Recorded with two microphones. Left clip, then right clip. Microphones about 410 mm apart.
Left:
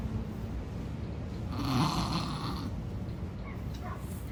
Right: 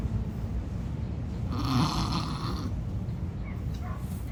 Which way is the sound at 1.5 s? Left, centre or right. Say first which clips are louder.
Right 2 dB; right.